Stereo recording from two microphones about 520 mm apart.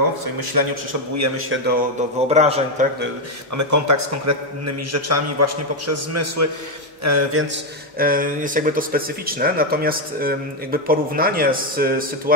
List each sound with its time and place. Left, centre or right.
0.2 s a man's voice: right
1.1 s a man's voice: right
2.2 s speech: centre
3.5 s a man's voice: right
8.0 s speech: centre